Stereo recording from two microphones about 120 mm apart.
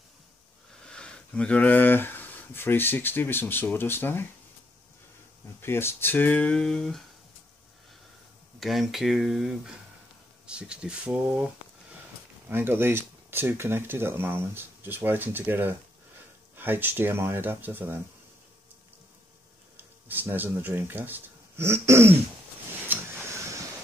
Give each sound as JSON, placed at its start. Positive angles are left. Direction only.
{"t": 0.8, "sound": "speech", "side_deg": 10}
{"t": 5.6, "sound": "speech", "side_deg": 20}
{"t": 8.5, "sound": "speech", "side_deg": 0}
{"t": 12.4, "sound": "speech", "side_deg": -15}
{"t": 19.8, "sound": "speech", "side_deg": -15}
{"t": 22.8, "sound": "a sound", "side_deg": -20}